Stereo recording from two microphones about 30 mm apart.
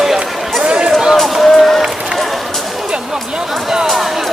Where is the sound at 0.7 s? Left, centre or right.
Right.